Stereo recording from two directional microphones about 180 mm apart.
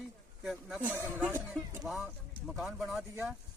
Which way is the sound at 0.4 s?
5° right (ahead or behind).